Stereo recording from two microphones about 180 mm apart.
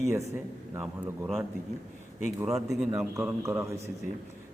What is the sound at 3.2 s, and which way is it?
Speech, 15° right (ahead or behind).